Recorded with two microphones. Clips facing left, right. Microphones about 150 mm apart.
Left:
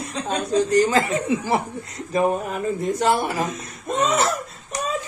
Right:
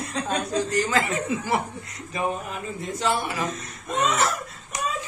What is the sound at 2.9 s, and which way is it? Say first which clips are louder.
Speech: left 2 dB; 45° left (ahead or behind).